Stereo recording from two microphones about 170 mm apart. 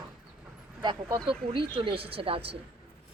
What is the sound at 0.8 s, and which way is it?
Speech, 25° right (ahead or behind).